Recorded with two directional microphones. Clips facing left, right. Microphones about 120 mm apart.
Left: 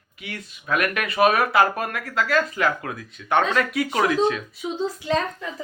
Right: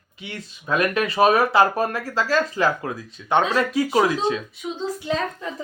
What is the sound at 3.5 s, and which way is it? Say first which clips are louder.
Speech: right 3 dB; 35° right (ahead or behind).